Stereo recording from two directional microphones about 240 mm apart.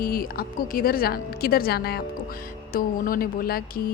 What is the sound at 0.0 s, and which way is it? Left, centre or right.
Speech, left.